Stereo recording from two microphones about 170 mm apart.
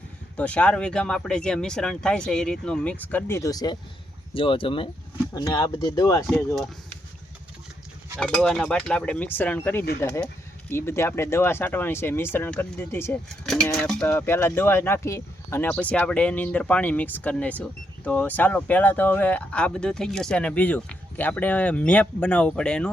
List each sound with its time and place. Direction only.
0.3 s speech: 5° left (ahead or behind)
8.2 s speech: 5° left (ahead or behind)
13.2 s speech: 5° left (ahead or behind)